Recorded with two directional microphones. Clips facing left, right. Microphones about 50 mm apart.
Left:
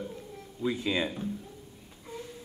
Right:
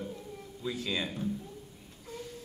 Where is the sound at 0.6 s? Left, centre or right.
Left.